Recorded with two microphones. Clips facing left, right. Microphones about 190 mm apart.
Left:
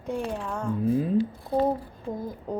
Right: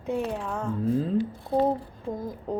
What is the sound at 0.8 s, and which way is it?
Speech, 15° left (ahead or behind).